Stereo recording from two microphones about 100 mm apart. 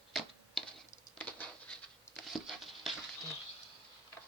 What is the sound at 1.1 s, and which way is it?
Patter, 15° left (ahead or behind).